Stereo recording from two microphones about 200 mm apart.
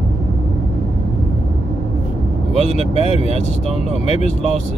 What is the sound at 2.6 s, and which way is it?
Speech, 30° right (ahead or behind).